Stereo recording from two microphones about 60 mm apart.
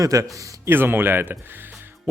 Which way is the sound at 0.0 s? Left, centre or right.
Right.